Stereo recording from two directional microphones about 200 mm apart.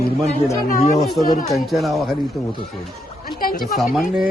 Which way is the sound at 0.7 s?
40° left (ahead or behind).